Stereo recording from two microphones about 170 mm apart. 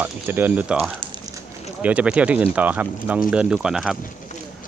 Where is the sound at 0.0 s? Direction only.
10° right (ahead or behind).